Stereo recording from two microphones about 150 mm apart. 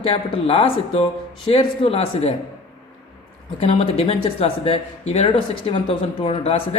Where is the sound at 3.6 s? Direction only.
40° left (ahead or behind).